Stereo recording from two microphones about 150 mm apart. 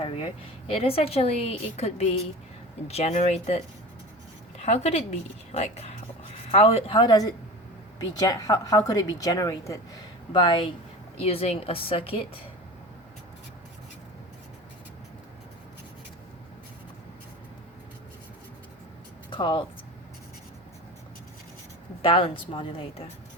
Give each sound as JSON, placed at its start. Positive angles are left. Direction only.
{"t": 0.0, "sound": "a woman's voice", "side_deg": 35}
{"t": 4.6, "sound": "a woman's voice", "side_deg": 45}
{"t": 19.3, "sound": "speech", "side_deg": 30}
{"t": 22.0, "sound": "a woman's voice", "side_deg": 35}